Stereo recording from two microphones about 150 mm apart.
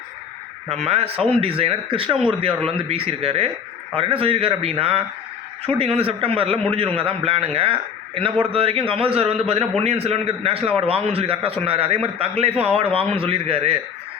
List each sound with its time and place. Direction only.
0.7 s a man's voice: 40° right (ahead or behind)